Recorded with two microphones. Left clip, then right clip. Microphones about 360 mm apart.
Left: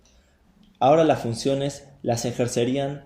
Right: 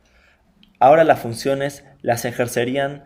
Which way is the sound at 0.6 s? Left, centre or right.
Right.